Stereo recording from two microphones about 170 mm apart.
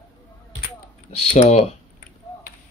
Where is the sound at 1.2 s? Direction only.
35° left (ahead or behind).